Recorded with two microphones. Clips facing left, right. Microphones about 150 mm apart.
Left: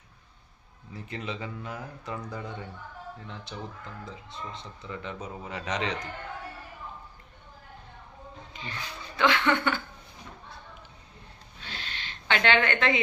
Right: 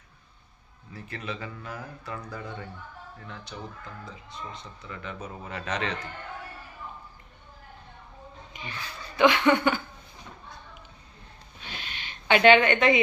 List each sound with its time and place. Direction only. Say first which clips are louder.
0.9 s speech: left 1 dB; 20° left (ahead or behind)
3.5 s a man's voice: left 1 dB; 25° left (ahead or behind)
9.1 s speech: right 4 dB; 15° right (ahead or behind)
11.6 s a sound: even; 15° right (ahead or behind)